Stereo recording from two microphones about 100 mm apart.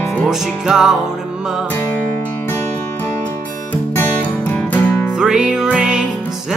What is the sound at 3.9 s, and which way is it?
Music, 20° left (ahead or behind).